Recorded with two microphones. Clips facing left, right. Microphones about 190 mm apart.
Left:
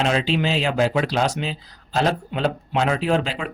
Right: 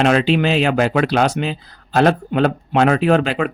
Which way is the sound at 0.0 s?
65° right (ahead or behind).